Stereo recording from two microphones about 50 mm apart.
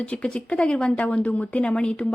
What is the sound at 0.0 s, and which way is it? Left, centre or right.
A woman's voice, left.